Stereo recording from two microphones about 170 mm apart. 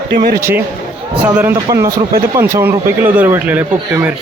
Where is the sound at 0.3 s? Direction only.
15° right (ahead or behind).